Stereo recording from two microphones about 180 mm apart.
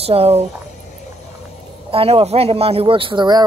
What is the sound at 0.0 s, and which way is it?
Speech, 35° right (ahead or behind).